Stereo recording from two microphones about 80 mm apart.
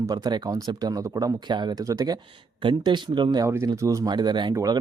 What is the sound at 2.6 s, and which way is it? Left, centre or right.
Speech, right.